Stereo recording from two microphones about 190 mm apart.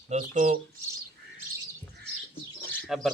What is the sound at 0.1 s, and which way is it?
Speech, 40° right (ahead or behind).